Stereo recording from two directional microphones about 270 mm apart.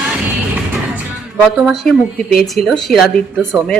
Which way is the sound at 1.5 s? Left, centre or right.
Centre.